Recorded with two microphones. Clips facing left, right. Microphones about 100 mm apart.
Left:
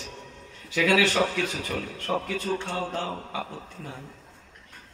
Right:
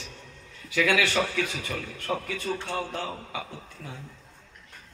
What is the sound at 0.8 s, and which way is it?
Speech, 35° left (ahead or behind).